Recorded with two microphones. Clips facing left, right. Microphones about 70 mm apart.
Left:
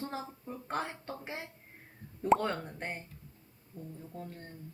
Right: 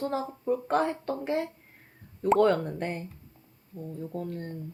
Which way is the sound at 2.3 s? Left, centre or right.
Right.